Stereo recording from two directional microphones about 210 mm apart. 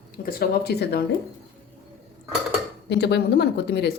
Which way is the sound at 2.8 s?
55° left (ahead or behind).